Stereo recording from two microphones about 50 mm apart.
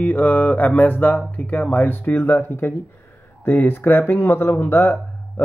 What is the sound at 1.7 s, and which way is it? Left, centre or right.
Speech, left.